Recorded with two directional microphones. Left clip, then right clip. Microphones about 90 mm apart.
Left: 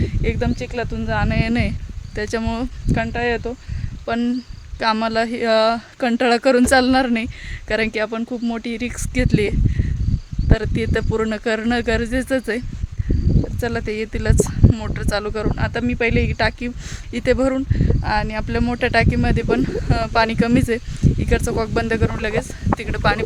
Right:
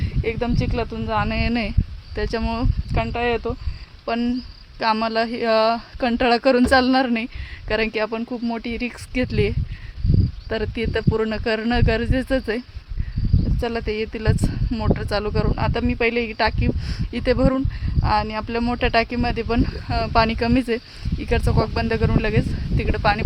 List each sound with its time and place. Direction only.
0.0 s speech: 30° left (ahead or behind)
2.9 s speech: 25° left (ahead or behind)